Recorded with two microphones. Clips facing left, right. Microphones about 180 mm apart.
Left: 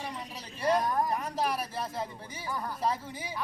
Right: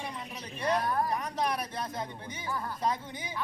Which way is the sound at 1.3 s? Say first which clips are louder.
Even; 5° left (ahead or behind).